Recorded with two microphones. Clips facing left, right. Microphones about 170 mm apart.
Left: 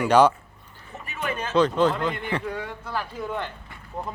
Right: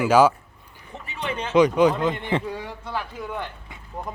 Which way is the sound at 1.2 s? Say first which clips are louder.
Right 3 dB; 20° right (ahead or behind).